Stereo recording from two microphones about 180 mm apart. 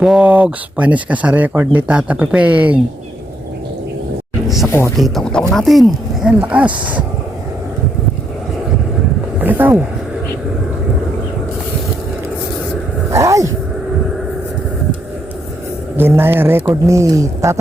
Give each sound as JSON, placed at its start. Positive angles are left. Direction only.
{"t": 0.0, "sound": "speech", "side_deg": -5}
{"t": 4.4, "sound": "a sound", "side_deg": 0}
{"t": 4.9, "sound": "speech", "side_deg": 0}
{"t": 9.4, "sound": "speech", "side_deg": -10}
{"t": 13.1, "sound": "roaring cats", "side_deg": -15}
{"t": 16.0, "sound": "speech", "side_deg": -10}